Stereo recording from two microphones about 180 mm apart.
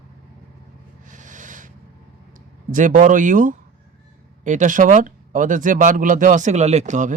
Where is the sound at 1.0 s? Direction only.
45° right (ahead or behind).